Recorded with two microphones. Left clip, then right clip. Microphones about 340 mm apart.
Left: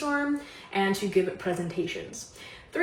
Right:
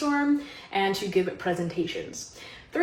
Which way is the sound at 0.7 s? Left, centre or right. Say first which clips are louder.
Right 1 dB; centre.